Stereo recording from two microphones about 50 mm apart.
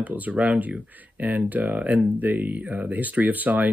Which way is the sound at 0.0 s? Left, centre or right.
Right.